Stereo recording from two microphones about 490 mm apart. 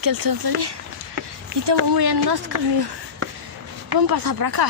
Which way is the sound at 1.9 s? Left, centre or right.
Right.